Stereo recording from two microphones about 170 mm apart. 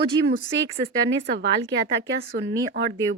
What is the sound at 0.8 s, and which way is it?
Speech, 90° right.